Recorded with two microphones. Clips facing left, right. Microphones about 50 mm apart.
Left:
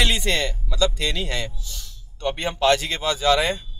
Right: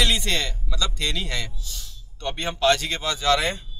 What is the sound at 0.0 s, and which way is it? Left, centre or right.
Speech, centre.